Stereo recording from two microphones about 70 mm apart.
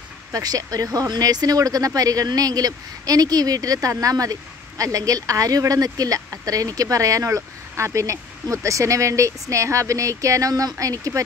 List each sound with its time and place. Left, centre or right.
0.3 s speech: right